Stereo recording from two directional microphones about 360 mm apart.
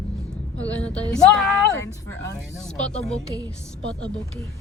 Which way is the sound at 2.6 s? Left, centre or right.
Centre.